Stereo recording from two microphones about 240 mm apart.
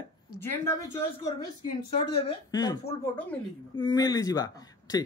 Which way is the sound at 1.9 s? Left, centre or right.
Left.